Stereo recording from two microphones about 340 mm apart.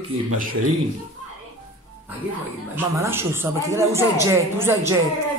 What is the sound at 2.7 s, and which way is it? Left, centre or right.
A woman's voice, centre.